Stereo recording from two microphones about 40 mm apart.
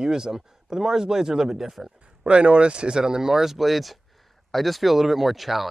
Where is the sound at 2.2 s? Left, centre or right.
Right; by 5.6 s centre.